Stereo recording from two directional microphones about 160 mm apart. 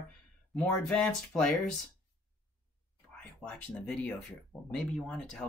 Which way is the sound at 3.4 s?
5° left (ahead or behind).